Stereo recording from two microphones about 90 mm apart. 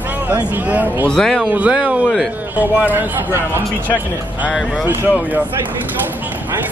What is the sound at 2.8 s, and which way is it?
Speech, 20° right (ahead or behind).